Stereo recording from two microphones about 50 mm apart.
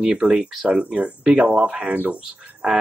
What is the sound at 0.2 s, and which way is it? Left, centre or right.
Speech, centre.